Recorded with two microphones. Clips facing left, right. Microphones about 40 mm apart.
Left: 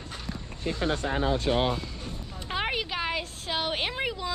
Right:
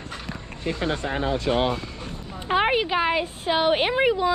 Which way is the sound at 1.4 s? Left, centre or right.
Right.